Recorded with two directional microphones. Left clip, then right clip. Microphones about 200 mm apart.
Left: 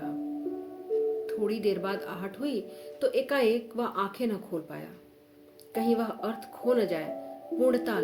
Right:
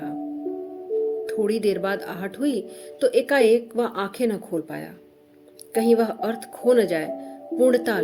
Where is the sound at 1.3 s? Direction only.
55° right (ahead or behind).